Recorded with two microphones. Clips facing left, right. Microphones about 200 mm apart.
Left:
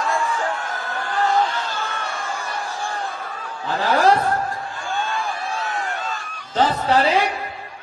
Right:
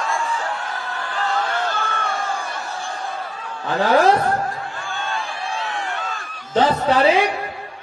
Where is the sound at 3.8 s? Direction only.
50° right (ahead or behind).